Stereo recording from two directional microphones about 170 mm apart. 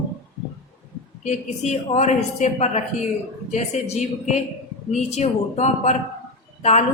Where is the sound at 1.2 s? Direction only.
40° left (ahead or behind).